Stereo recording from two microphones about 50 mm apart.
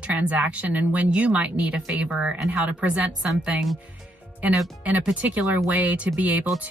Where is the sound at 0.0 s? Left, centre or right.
Right.